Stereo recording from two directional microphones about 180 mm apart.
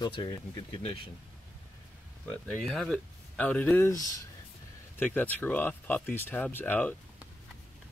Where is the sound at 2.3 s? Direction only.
5° left (ahead or behind).